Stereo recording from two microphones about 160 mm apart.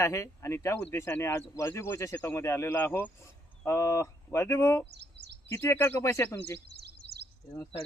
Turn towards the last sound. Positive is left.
turn(degrees=15)  # may be behind; listen again after turning